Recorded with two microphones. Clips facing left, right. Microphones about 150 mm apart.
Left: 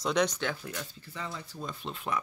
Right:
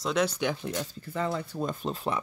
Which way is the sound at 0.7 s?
40° right (ahead or behind).